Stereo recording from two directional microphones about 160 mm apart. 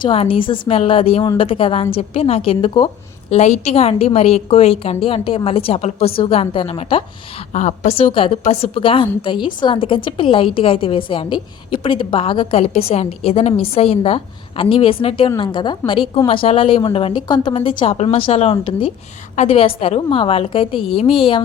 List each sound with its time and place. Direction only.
0.0 s a woman's voice: 35° left (ahead or behind)
3.3 s a woman's voice: 45° left (ahead or behind)
7.5 s a woman's voice: 50° left (ahead or behind)